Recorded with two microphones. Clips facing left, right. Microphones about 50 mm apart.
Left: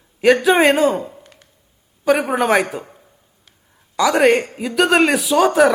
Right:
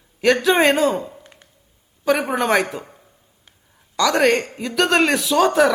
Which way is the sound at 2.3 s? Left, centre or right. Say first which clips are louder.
Left 2 dB; centre.